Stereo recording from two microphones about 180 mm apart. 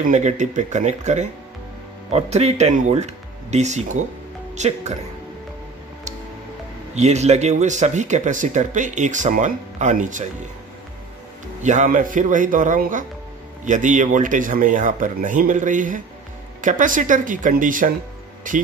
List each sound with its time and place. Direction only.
0.1 s speech: 40° right (ahead or behind)
7.0 s speech: 40° right (ahead or behind)
11.6 s speech: 40° right (ahead or behind)